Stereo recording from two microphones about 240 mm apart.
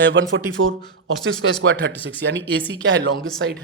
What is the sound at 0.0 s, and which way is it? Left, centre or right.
A man's voice, right.